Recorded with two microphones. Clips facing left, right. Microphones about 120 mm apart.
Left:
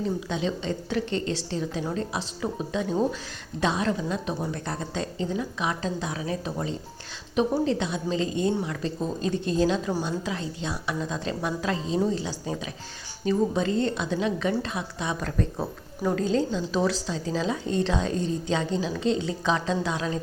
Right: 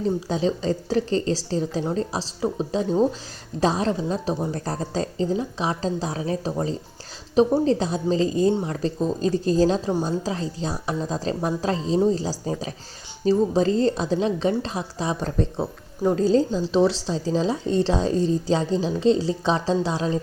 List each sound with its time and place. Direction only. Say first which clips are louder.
0.0 s a woman's voice: right 5 dB; 35° right (ahead or behind)